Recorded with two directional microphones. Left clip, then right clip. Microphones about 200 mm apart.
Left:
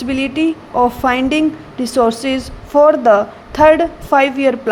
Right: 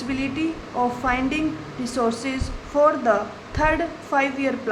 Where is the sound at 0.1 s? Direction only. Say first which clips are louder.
Left 9 dB; 35° left (ahead or behind).